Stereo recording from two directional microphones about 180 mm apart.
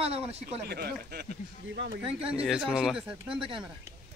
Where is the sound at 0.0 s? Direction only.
35° right (ahead or behind).